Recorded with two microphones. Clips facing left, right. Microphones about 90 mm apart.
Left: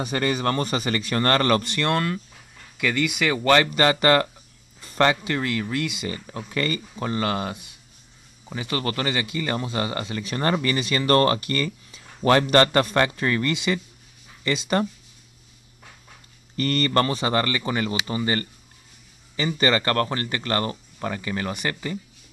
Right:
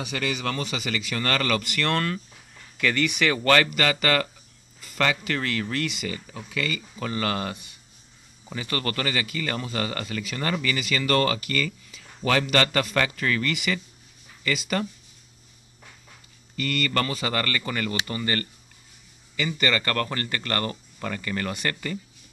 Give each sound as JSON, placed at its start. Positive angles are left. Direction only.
{"t": 0.0, "sound": "speech", "side_deg": 40}
{"t": 1.8, "sound": "speech", "side_deg": 15}
{"t": 3.7, "sound": "speech", "side_deg": 30}
{"t": 4.8, "sound": "music", "side_deg": 35}
{"t": 5.2, "sound": "speech", "side_deg": 15}
{"t": 6.0, "sound": "speech", "side_deg": 45}
{"t": 7.0, "sound": "speech", "side_deg": 20}
{"t": 10.3, "sound": "speech", "side_deg": 40}
{"t": 16.5, "sound": "speech", "side_deg": 40}
{"t": 19.3, "sound": "speech", "side_deg": 30}